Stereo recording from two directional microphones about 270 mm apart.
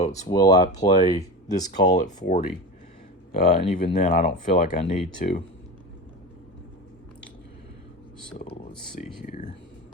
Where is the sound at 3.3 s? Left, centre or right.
Left.